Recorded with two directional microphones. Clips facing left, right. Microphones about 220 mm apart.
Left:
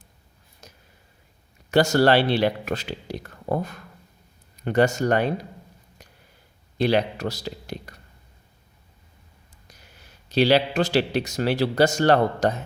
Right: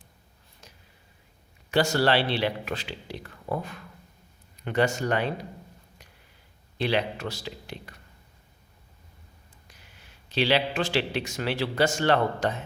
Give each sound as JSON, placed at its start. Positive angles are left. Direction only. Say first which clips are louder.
{"t": 0.6, "sound": "a sound", "louder": "left 4 dB", "side_deg": 45}
{"t": 1.7, "sound": "speech", "louder": "left 5 dB", "side_deg": 45}
{"t": 6.7, "sound": "a man's voice", "louder": "left 5 dB", "side_deg": 40}
{"t": 9.6, "sound": "speech", "louder": "left 5 dB", "side_deg": 40}